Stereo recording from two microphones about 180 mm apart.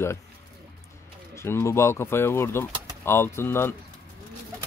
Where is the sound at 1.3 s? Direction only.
15° left (ahead or behind).